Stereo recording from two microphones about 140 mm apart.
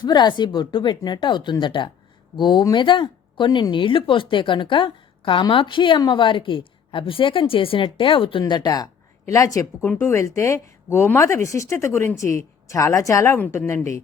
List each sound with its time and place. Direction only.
0.0 s speech: 30° left (ahead or behind)